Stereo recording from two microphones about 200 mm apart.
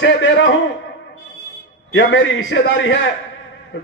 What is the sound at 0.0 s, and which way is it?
Speech, 65° left (ahead or behind).